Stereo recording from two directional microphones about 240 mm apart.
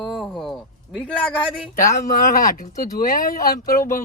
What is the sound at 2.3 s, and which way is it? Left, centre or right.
Speech, left.